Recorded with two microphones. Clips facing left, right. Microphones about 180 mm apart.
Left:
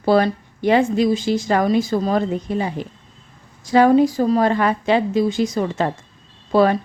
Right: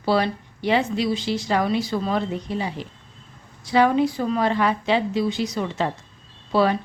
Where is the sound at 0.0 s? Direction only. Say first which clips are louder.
Left 5 dB; 50° left (ahead or behind).